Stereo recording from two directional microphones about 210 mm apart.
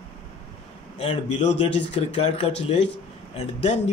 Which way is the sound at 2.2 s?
25° left (ahead or behind).